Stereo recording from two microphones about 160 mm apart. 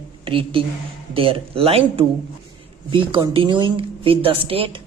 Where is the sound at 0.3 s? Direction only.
35° right (ahead or behind).